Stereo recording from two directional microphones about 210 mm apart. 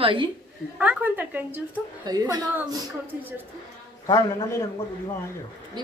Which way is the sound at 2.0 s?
20° right (ahead or behind).